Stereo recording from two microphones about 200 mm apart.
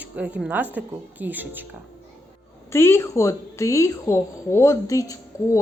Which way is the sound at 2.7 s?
10° left (ahead or behind).